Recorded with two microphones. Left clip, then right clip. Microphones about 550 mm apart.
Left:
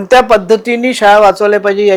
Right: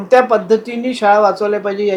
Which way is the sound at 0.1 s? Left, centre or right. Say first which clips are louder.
Left 4 dB; left.